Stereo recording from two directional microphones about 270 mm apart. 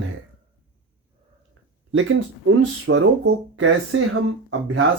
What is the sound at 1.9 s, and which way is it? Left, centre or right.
Speech, right.